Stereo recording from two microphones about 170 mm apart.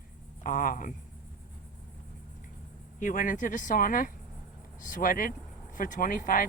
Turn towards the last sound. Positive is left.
turn(degrees=55)  # may be behind; listen again after turning